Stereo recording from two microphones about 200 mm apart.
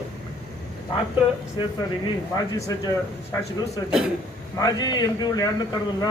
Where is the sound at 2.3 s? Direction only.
20° left (ahead or behind).